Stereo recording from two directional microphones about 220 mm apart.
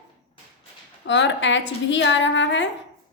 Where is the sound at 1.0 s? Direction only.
55° left (ahead or behind).